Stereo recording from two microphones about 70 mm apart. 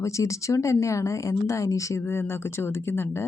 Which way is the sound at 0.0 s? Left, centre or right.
Left.